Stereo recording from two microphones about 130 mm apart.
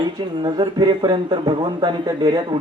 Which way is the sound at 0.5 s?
35° right (ahead or behind).